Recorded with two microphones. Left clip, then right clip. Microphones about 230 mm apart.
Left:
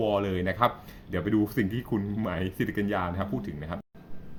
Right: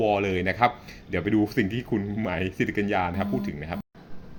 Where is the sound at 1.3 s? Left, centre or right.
Left.